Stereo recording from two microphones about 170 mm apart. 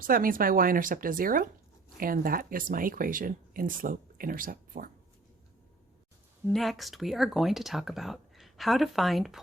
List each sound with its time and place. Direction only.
0.0 s speech: 55° right (ahead or behind)
6.5 s speech: centre (ahead or behind)